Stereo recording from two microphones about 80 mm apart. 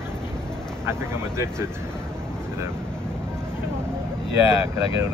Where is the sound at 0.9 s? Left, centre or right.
Right.